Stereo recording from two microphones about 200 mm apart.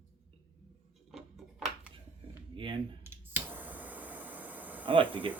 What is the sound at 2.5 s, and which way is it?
Computer keyboard, 25° right (ahead or behind).